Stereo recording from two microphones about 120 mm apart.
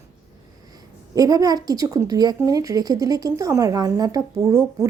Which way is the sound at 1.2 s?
30° right (ahead or behind).